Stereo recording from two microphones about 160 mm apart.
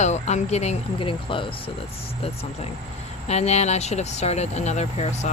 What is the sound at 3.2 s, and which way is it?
Speech, 45° left (ahead or behind).